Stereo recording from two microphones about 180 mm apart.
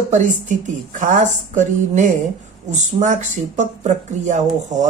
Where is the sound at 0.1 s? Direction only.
45° right (ahead or behind).